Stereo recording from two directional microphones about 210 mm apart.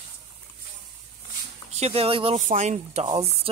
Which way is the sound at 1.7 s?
30° right (ahead or behind).